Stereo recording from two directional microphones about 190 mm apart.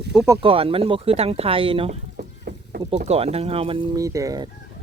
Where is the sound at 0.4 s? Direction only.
30° right (ahead or behind).